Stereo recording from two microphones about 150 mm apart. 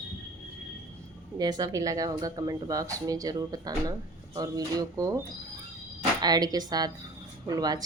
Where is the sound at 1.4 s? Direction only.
25° right (ahead or behind).